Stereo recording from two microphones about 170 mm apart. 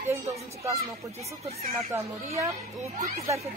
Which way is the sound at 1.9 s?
15° right (ahead or behind).